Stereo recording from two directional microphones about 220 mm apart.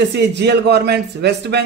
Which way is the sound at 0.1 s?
50° right (ahead or behind).